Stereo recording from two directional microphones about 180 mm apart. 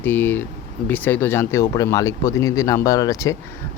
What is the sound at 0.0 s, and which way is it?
Speech, 10° left (ahead or behind).